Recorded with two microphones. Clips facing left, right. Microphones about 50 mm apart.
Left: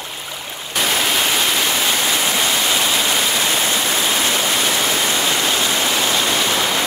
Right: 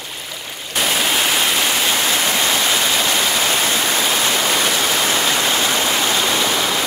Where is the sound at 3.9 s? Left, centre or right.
Centre.